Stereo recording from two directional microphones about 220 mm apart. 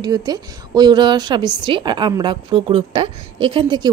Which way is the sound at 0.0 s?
20° right (ahead or behind).